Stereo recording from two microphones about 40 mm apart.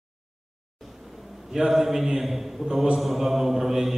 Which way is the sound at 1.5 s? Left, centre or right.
Centre.